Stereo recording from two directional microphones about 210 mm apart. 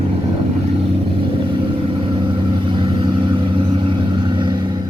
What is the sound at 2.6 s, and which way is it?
Vehicle, 25° right (ahead or behind).